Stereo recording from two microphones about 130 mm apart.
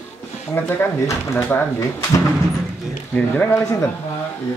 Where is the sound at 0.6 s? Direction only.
20° left (ahead or behind).